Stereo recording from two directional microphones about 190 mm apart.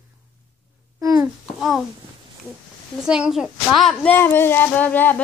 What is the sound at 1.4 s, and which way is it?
Babbling, centre (ahead or behind).